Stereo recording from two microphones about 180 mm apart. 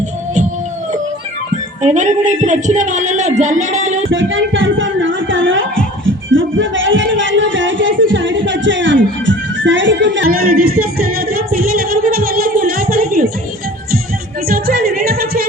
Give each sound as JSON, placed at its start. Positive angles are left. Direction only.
{"t": 1.8, "sound": "speech", "side_deg": -40}
{"t": 4.1, "sound": "a sound", "side_deg": -90}
{"t": 6.3, "sound": "speech", "side_deg": -90}
{"t": 10.2, "sound": "singing", "side_deg": -55}
{"t": 14.4, "sound": "music", "side_deg": -55}